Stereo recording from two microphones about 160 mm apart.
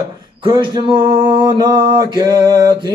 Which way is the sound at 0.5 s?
30° right (ahead or behind).